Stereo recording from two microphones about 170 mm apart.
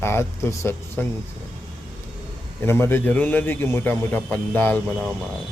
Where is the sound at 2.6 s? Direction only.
15° left (ahead or behind).